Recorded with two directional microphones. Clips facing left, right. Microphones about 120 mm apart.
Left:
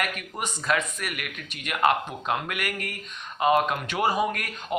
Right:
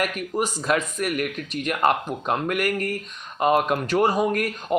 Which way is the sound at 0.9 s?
40° right (ahead or behind).